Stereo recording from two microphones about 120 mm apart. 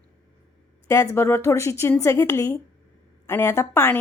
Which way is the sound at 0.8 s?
20° left (ahead or behind).